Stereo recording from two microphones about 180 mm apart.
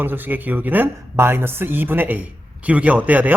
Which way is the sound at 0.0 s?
10° right (ahead or behind).